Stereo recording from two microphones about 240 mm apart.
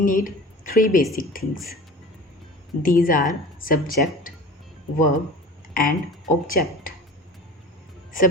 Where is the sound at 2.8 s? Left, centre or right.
Left.